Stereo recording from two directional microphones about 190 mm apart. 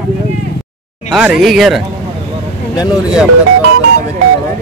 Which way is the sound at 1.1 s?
Centre (ahead or behind).